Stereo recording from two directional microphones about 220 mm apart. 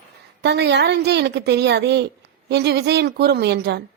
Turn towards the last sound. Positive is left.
turn(degrees=-50)  # may be behind; listen again after turning